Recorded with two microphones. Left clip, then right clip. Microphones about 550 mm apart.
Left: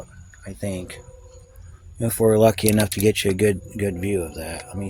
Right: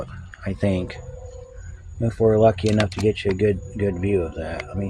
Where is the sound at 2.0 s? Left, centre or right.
Left.